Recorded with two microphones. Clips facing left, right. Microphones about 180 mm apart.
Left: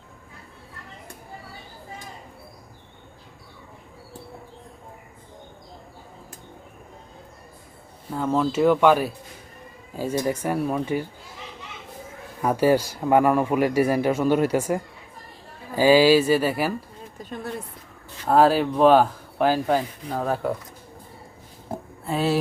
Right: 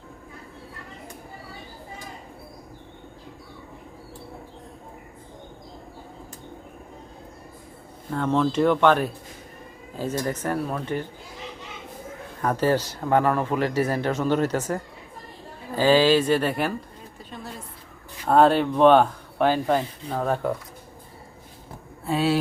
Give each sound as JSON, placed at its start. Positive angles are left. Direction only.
{"t": 8.1, "sound": "speech", "side_deg": 5}
{"t": 12.4, "sound": "speech", "side_deg": 10}
{"t": 17.2, "sound": "a sound", "side_deg": 50}
{"t": 18.3, "sound": "speech", "side_deg": 5}
{"t": 22.0, "sound": "speech", "side_deg": 0}